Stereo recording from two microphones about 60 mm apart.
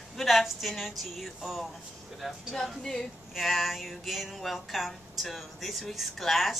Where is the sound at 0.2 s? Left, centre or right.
Centre.